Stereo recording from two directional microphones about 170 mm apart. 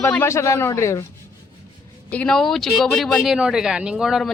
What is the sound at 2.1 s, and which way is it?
Speech, 5° left (ahead or behind).